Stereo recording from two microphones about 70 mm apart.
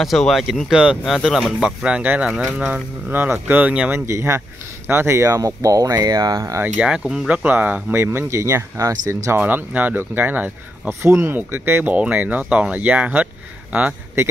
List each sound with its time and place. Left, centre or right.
0.0 s speech: centre
1.9 s speech: centre
2.7 s speech: right
3.9 s speech: right
6.8 s speech: centre
7.2 s speech: right
7.9 s speech: right
9.4 s speech: right